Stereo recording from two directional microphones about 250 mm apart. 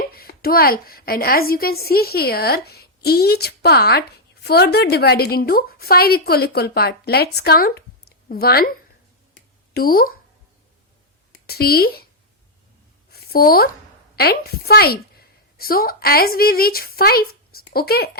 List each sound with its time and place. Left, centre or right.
0.1 s a woman's voice: left
9.7 s a woman's voice: left
11.4 s a woman's voice: left
13.1 s a sound: left
14.2 s a woman's voice: left